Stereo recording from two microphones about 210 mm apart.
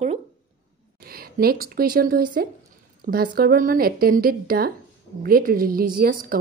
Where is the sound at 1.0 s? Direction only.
45° right (ahead or behind).